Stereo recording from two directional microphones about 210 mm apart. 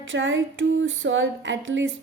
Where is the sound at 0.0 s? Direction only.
65° right (ahead or behind).